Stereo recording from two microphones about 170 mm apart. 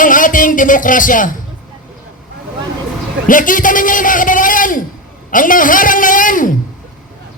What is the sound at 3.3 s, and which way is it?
A man's voice, 50° left (ahead or behind).